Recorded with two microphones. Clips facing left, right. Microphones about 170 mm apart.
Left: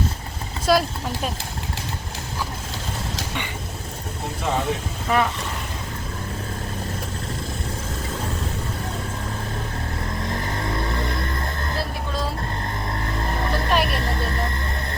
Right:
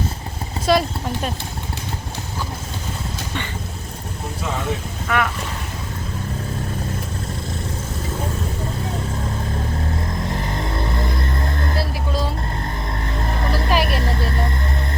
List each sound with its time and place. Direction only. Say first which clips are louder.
0.7 s speech: right 1 dB; centre (ahead or behind)
5.0 s speech: left 1 dB; 30° left (ahead or behind)
13.5 s vehicle: right 2 dB; centre (ahead or behind)